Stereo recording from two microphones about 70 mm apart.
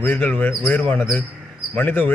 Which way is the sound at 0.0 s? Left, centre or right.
Left.